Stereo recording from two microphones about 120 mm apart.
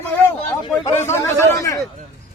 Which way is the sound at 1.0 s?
20° left (ahead or behind).